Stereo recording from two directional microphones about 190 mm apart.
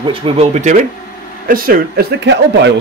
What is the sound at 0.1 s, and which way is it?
Speech, 30° right (ahead or behind).